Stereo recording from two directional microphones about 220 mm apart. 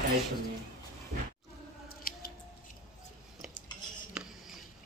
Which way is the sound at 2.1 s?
45° left (ahead or behind).